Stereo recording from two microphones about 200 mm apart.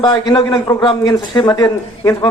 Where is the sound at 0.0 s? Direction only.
20° left (ahead or behind).